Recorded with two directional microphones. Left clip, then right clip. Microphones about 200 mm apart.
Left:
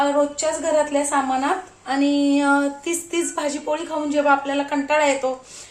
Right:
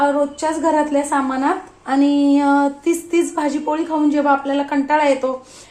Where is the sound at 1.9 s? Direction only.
25° right (ahead or behind).